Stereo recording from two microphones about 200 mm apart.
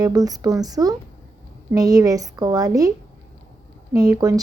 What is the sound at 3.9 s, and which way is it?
Speech, 20° right (ahead or behind).